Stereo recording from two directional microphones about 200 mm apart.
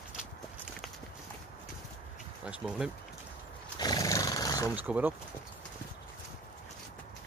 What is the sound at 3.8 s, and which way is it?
Roar, 20° left (ahead or behind).